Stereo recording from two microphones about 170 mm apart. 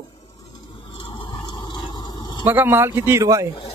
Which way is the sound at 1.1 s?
25° left (ahead or behind).